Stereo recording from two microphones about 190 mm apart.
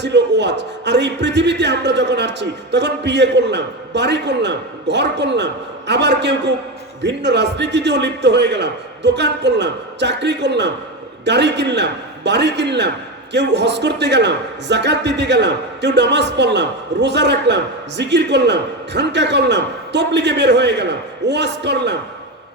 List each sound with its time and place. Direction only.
0.0 s a man's voice: 65° right (ahead or behind)